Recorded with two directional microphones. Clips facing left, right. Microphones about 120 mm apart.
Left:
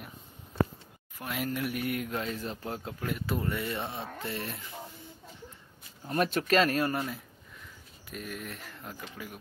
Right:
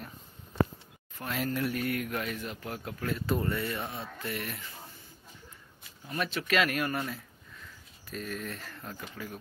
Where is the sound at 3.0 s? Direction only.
15° left (ahead or behind).